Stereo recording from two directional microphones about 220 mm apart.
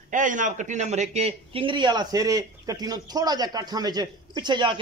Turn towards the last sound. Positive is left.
turn(degrees=-20)  # may be behind; listen again after turning